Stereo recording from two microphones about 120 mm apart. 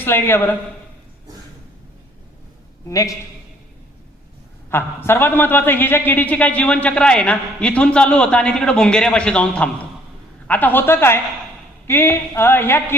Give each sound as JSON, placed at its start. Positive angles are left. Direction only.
{"t": 0.0, "sound": "a man's voice", "side_deg": 20}
{"t": 2.8, "sound": "a woman's voice", "side_deg": 30}
{"t": 4.7, "sound": "a man's voice", "side_deg": 20}